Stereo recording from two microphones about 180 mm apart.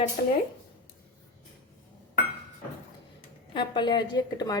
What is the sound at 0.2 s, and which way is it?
Speech, 40° left (ahead or behind).